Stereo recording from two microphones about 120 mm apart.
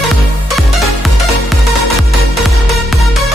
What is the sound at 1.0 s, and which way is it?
Music, centre (ahead or behind).